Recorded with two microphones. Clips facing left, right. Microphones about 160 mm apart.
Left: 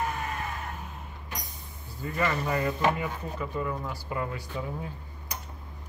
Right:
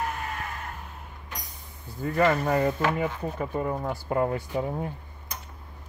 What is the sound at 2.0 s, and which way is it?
Speech, 50° right (ahead or behind).